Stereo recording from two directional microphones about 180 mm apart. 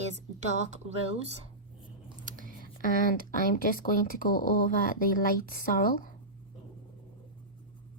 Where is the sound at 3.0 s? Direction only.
50° left (ahead or behind).